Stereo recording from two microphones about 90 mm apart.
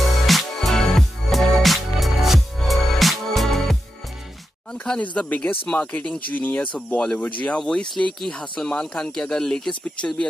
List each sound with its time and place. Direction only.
0.3 s music: centre (ahead or behind)
4.8 s speech: 15° left (ahead or behind)